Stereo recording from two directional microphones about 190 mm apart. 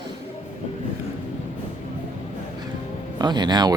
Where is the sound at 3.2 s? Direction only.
20° right (ahead or behind).